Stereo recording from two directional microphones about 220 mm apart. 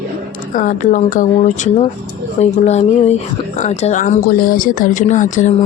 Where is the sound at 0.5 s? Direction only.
35° left (ahead or behind).